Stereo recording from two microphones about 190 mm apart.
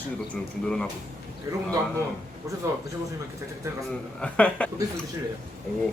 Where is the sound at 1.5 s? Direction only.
15° right (ahead or behind).